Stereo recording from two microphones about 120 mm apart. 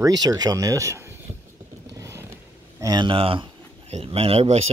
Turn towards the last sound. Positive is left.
turn(degrees=-60)  # may be behind; listen again after turning